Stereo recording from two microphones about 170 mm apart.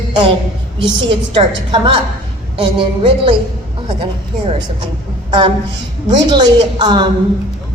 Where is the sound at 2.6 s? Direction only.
30° right (ahead or behind).